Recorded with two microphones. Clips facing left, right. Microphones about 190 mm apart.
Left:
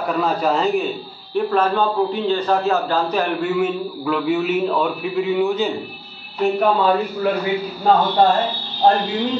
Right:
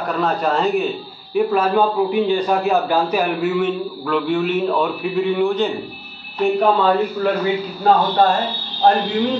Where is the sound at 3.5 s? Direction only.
5° left (ahead or behind).